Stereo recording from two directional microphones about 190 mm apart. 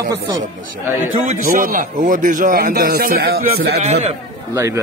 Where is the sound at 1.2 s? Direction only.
45° right (ahead or behind).